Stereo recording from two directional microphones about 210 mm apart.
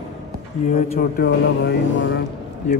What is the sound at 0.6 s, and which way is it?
Speech, 45° left (ahead or behind).